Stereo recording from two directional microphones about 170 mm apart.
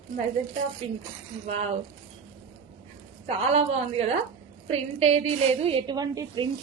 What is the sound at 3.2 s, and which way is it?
A woman's voice, 40° right (ahead or behind).